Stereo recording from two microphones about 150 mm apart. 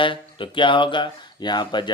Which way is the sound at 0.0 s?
35° left (ahead or behind).